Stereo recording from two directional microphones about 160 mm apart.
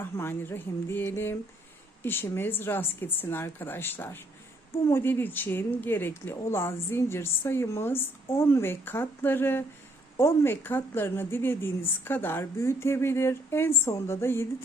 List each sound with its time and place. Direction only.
0.0 s speech: 15° left (ahead or behind)